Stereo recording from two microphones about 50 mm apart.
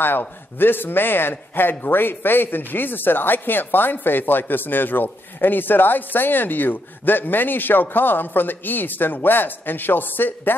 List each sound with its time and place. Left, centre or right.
0.6 s speech: left